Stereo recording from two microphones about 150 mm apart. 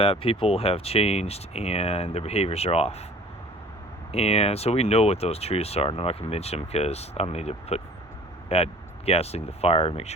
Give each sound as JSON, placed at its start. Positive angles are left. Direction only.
{"t": 0.0, "sound": "speech", "side_deg": 40}
{"t": 4.1, "sound": "speech", "side_deg": 45}